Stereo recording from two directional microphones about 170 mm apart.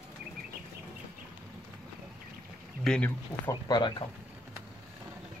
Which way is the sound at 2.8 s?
5° left (ahead or behind).